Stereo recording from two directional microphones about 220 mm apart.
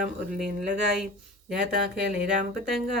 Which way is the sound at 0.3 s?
Centre (ahead or behind).